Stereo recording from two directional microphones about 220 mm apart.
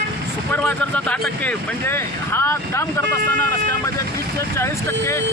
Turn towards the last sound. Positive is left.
turn(degrees=10)  # may be behind; listen again after turning